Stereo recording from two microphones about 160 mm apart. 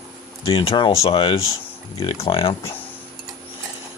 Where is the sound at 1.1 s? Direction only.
30° left (ahead or behind).